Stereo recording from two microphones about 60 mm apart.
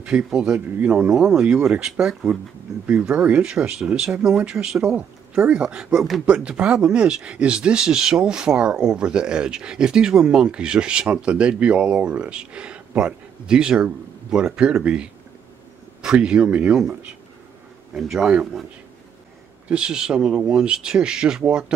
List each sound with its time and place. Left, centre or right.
0.0 s speech: centre
17.9 s speech: centre
19.7 s speech: centre